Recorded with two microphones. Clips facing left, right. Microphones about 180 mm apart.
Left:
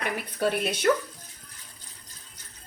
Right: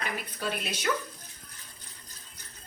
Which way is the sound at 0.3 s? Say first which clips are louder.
Left 11 dB; 55° left (ahead or behind).